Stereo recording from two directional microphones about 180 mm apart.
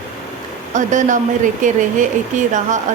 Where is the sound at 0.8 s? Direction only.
45° right (ahead or behind).